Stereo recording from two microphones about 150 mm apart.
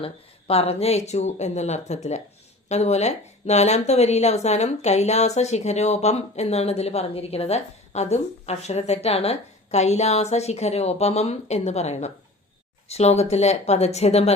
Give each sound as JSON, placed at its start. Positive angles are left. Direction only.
{"t": 0.0, "sound": "speech", "side_deg": 40}